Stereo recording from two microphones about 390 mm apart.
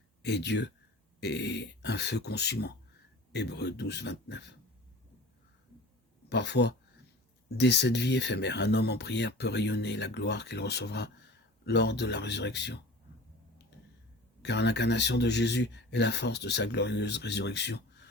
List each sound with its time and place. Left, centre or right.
0.2 s speech: left
6.2 s speech: left
14.4 s speech: left